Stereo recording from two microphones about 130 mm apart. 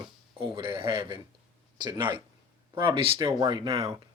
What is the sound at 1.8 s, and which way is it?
A man's voice, 35° right (ahead or behind).